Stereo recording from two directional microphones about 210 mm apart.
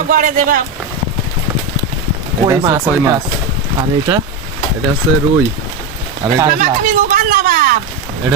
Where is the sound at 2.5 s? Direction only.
15° right (ahead or behind).